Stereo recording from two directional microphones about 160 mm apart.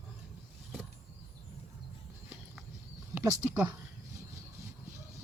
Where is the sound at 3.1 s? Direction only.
15° right (ahead or behind).